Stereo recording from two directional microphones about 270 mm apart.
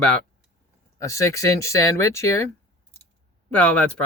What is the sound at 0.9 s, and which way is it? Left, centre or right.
Speech, centre.